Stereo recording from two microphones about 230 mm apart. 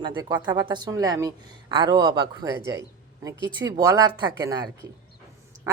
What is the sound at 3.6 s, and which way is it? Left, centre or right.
A woman's voice, centre.